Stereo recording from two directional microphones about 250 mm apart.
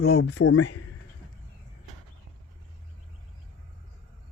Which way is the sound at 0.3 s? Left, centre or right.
Left.